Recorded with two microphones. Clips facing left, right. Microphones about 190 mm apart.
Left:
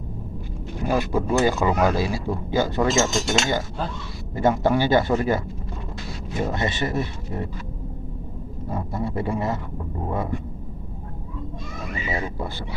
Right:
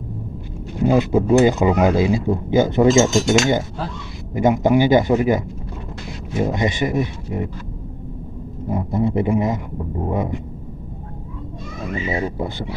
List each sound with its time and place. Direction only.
0.8 s a man's voice: 20° right (ahead or behind)
6.4 s a man's voice: 15° right (ahead or behind)
8.6 s speech: 20° right (ahead or behind)
12.1 s speech: 20° right (ahead or behind)